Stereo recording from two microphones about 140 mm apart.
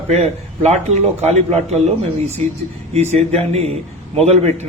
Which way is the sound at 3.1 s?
45° right (ahead or behind).